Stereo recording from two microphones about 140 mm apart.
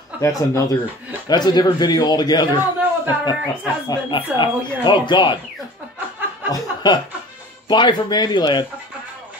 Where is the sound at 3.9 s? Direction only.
35° left (ahead or behind).